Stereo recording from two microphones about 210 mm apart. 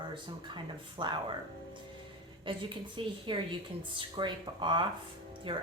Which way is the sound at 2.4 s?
25° right (ahead or behind).